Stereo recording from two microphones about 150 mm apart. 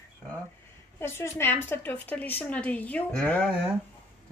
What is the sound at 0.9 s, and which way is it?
A woman's voice, 15° left (ahead or behind).